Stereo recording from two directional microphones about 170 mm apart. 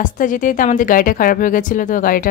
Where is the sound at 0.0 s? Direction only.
50° left (ahead or behind).